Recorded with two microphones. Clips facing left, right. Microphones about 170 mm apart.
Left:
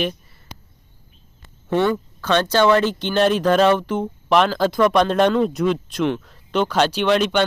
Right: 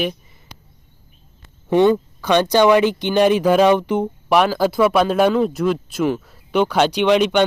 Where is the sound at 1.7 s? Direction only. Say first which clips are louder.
Right 5 dB; 20° right (ahead or behind).